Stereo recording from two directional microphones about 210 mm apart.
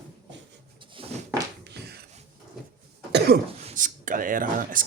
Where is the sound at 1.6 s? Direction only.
50° right (ahead or behind).